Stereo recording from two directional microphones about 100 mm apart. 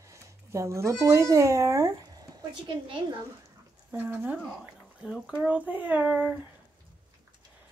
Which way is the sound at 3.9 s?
20° right (ahead or behind).